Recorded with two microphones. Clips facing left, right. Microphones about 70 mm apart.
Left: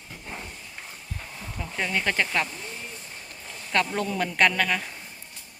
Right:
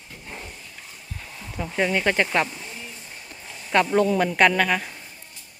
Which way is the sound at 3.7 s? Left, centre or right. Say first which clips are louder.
Right 7 dB; centre.